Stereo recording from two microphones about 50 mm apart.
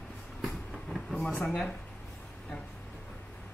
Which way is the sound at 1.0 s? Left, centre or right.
Centre.